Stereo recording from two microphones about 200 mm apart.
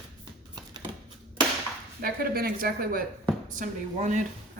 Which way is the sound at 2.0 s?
45° right (ahead or behind).